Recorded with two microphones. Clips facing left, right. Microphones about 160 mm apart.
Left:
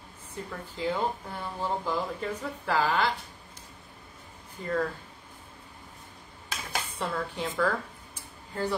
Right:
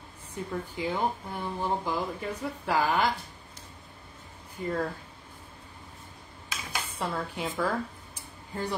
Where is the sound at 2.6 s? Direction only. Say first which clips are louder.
Even; 15° right (ahead or behind).